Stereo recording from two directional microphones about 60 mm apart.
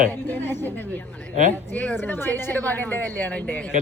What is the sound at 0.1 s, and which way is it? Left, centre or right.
Speech, left.